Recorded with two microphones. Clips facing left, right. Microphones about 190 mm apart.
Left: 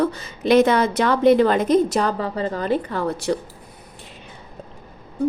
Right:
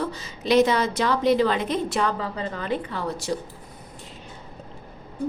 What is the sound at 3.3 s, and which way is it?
Speech, 65° left (ahead or behind).